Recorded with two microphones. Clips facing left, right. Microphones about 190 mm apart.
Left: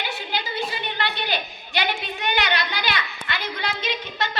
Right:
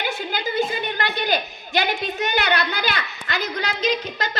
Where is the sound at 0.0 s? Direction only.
50° right (ahead or behind).